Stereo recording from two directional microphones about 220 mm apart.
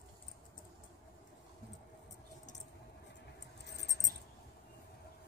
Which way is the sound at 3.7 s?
50° left (ahead or behind).